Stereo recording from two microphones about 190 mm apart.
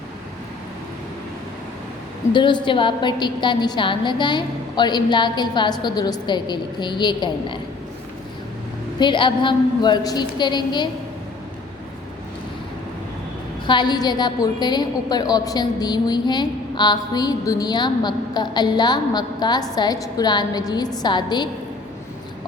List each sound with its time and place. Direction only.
2.3 s a woman's voice: 25° left (ahead or behind)
9.0 s a woman's voice: 25° left (ahead or behind)
13.7 s a woman's voice: 25° left (ahead or behind)